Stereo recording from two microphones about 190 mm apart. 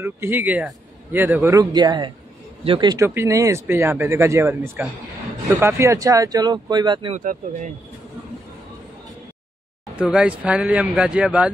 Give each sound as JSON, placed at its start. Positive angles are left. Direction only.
{"t": 0.0, "sound": "speech", "side_deg": -10}
{"t": 7.2, "sound": "speech", "side_deg": -40}
{"t": 9.9, "sound": "speech", "side_deg": -5}